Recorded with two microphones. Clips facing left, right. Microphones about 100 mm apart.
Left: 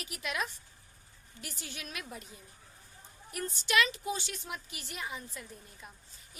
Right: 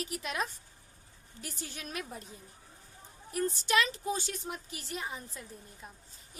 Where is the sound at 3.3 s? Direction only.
35° right (ahead or behind).